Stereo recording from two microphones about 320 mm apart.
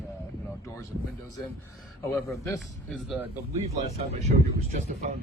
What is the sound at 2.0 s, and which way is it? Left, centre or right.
Speech, centre.